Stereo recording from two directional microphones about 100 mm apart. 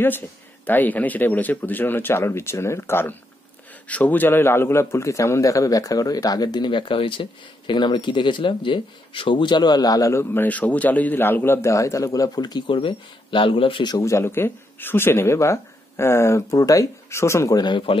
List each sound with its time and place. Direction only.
0.7 s a man's voice: 15° left (ahead or behind); by 10.2 s 35° left (ahead or behind)
10.3 s a man's voice: 15° left (ahead or behind); by 13.8 s 60° left (ahead or behind)
13.8 s speech: 35° left (ahead or behind)
17.6 s speech: 45° left (ahead or behind)